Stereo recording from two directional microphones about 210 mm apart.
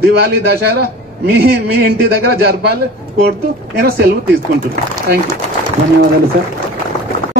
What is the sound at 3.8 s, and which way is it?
Speech, 45° right (ahead or behind).